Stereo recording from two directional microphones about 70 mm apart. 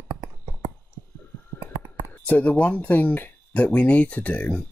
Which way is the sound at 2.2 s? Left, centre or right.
Left.